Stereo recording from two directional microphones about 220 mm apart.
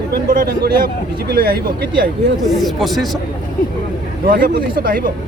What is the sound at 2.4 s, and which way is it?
Speech, centre (ahead or behind).